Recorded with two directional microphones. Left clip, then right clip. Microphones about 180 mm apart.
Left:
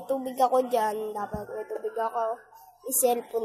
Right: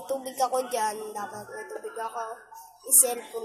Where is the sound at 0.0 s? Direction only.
45° left (ahead or behind).